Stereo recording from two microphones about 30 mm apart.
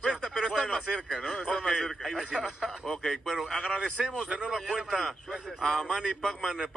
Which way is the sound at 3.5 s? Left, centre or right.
Centre.